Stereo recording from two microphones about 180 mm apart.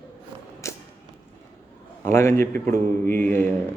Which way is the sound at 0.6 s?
15° left (ahead or behind).